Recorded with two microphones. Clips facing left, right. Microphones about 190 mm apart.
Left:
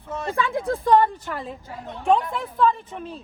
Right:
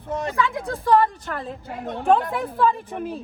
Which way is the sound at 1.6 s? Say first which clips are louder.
Right 6 dB; 60° right (ahead or behind).